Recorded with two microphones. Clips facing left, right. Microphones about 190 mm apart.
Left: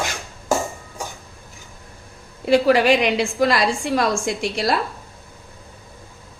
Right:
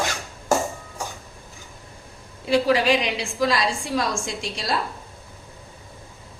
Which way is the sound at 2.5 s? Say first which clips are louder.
Left 4 dB; 60° left (ahead or behind).